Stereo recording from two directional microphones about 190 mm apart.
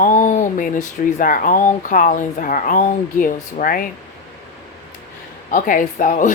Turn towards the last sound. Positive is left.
turn(degrees=40)  # may be behind; listen again after turning